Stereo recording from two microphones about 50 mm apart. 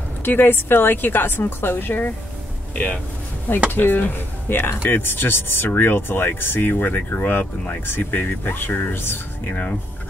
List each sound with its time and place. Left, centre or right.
0.2 s speech: left
2.7 s speech: left
3.7 s speech: left